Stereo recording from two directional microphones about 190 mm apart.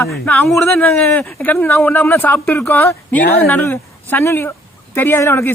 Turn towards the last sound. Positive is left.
turn(degrees=10)  # may be behind; listen again after turning